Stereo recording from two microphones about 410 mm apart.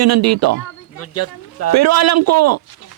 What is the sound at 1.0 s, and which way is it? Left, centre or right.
Speech, left.